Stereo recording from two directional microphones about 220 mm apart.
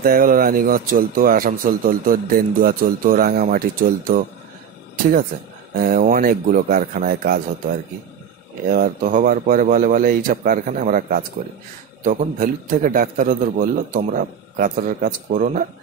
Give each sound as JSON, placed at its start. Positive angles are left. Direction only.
{"t": 0.0, "sound": "a man's voice", "side_deg": -40}
{"t": 5.8, "sound": "a man's voice", "side_deg": -40}
{"t": 8.7, "sound": "a man's voice", "side_deg": -40}